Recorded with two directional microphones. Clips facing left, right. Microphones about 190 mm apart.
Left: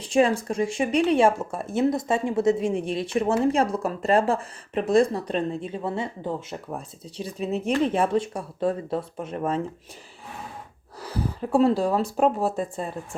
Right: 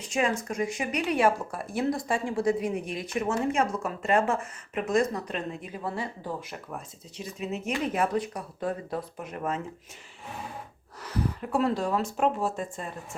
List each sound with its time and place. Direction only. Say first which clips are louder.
0.0 s speech: left 7 dB; 30° left (ahead or behind)
11.0 s speech: left 2 dB; 30° left (ahead or behind)